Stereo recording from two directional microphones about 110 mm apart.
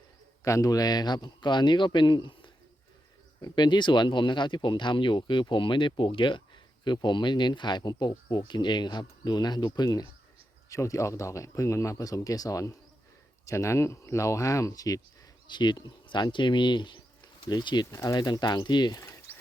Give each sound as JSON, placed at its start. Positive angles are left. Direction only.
{"t": 0.4, "sound": "speech", "side_deg": 30}
{"t": 15.4, "sound": "speech", "side_deg": 45}
{"t": 18.9, "sound": "a sound", "side_deg": 30}